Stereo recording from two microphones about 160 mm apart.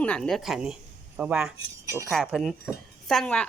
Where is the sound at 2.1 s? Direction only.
Centre (ahead or behind).